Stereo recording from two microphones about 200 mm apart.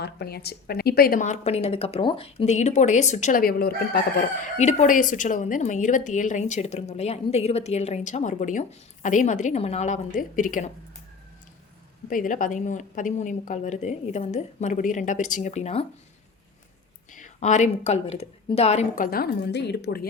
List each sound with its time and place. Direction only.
0.0 s a woman's voice: 55° left (ahead or behind)
4.4 s a woman's voice: 35° left (ahead or behind)
12.0 s a woman's voice: 45° left (ahead or behind)
17.1 s a woman's voice: 40° left (ahead or behind); by 20.1 s 55° left (ahead or behind)